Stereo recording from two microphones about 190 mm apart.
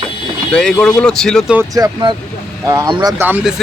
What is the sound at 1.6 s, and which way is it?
Speech, 20° right (ahead or behind).